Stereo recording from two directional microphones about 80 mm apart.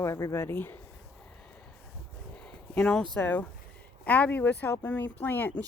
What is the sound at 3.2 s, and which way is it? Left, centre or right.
Speech, left.